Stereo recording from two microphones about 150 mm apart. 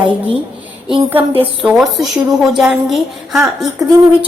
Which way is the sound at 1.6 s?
15° right (ahead or behind).